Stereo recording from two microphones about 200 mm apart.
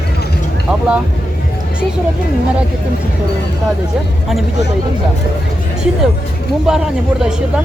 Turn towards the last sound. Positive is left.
turn(degrees=-5)  # may be behind; listen again after turning